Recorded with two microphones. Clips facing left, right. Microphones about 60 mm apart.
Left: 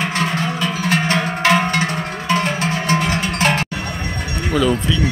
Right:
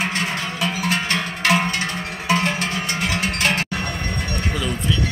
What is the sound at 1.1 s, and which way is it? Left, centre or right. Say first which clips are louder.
Music: left 4 dB; left.